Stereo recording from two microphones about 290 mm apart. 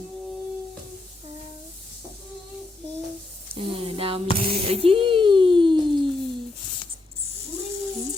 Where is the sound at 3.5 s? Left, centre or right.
Centre.